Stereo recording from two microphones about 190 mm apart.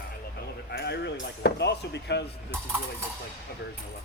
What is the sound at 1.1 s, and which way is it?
Chop, 60° left (ahead or behind).